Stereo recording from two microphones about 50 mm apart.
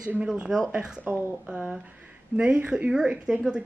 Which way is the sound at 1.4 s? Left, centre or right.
Centre.